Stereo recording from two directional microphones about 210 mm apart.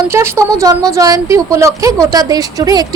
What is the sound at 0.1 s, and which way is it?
A woman's voice, 10° right (ahead or behind).